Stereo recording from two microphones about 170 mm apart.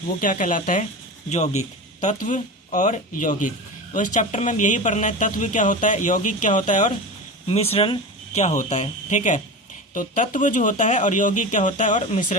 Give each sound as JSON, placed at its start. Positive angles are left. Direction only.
{"t": 0.2, "sound": "speech", "side_deg": 50}
{"t": 2.0, "sound": "speech", "side_deg": 45}
{"t": 7.4, "sound": "speech", "side_deg": 35}